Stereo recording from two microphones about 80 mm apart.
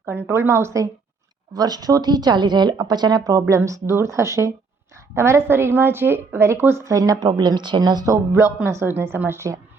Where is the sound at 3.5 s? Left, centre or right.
Right.